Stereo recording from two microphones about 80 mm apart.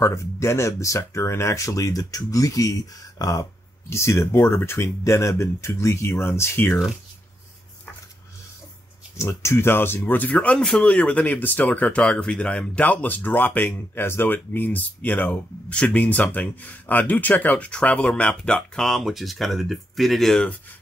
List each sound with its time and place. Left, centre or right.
0.0 s speech: left
9.1 s speech: left
10.3 s speech: centre
18.9 s speech: centre